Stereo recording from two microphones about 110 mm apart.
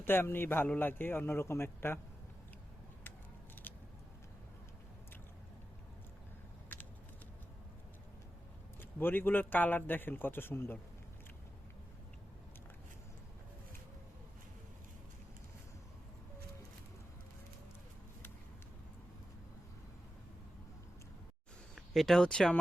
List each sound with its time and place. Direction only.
0.0 s a man's voice: 20° left (ahead or behind)
3.6 s vehicle: 15° left (ahead or behind)
8.8 s a man's voice: 20° left (ahead or behind)
21.8 s speech: centre (ahead or behind)